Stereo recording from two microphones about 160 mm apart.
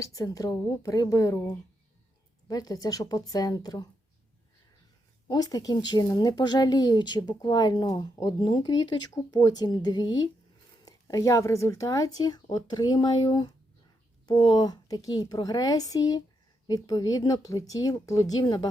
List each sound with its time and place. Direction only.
0.0 s speech: 20° left (ahead or behind)
5.3 s speech: 25° left (ahead or behind)
14.5 s speech: 25° left (ahead or behind)